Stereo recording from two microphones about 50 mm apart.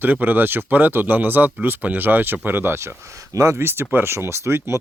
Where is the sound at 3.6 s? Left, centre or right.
Right.